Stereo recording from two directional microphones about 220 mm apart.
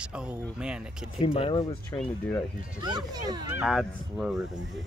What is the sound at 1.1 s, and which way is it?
Speech, 25° left (ahead or behind).